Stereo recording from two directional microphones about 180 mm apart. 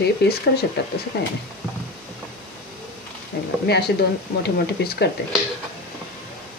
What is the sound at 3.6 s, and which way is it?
Speech, 65° left (ahead or behind).